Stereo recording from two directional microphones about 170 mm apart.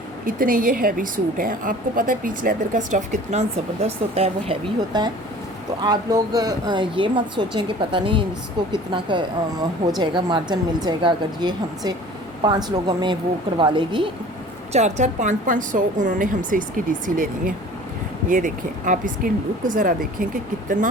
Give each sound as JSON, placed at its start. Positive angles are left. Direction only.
{"t": 0.3, "sound": "a woman's voice", "side_deg": -55}
{"t": 3.8, "sound": "speech", "side_deg": -35}
{"t": 4.9, "sound": "speech", "side_deg": -25}
{"t": 14.7, "sound": "a woman's voice", "side_deg": -40}